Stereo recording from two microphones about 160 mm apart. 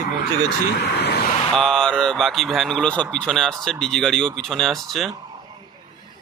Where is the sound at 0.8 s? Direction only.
90° left.